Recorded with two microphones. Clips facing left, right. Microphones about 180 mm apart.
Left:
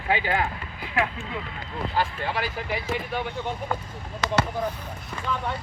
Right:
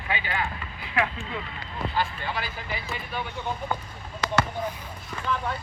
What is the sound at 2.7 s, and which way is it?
Speech, 80° left.